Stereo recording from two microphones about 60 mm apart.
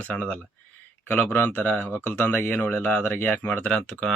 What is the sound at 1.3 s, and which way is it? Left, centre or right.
Speech, left.